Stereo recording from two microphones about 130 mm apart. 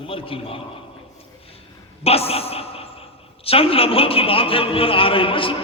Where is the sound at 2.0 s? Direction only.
50° left (ahead or behind).